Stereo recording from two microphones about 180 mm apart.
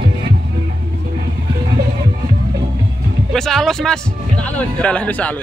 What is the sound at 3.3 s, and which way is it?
A man's voice, centre (ahead or behind).